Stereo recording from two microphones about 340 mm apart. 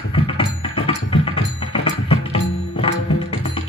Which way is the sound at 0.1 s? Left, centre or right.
Centre.